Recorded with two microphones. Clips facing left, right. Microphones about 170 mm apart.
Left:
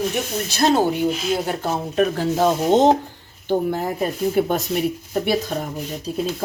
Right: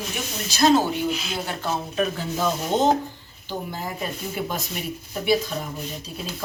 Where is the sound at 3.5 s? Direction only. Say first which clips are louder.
Left 10 dB; 60° left (ahead or behind).